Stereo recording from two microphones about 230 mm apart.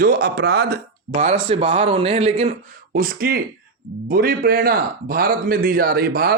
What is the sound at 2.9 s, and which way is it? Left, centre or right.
Speech, right.